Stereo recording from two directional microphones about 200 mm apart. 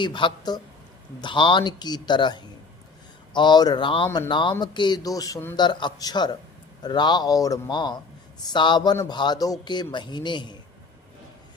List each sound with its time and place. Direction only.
0.0 s speech: 25° left (ahead or behind)